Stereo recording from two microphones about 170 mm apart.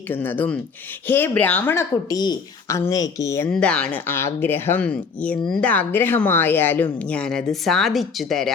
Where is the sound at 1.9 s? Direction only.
25° left (ahead or behind).